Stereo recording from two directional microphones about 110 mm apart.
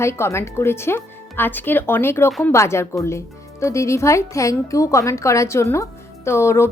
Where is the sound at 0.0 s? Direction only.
25° left (ahead or behind).